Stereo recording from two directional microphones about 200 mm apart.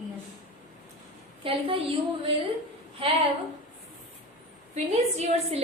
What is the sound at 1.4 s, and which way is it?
Speech, 25° right (ahead or behind).